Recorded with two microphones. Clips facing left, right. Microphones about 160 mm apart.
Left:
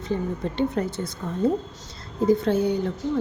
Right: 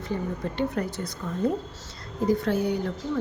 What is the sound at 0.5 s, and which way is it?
A woman's voice, 25° left (ahead or behind).